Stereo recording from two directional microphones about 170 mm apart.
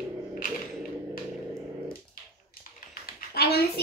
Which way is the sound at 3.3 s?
65° left (ahead or behind).